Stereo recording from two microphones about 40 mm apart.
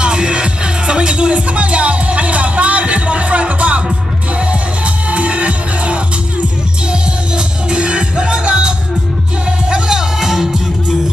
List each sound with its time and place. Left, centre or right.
0.0 s music: right
9.7 s music: centre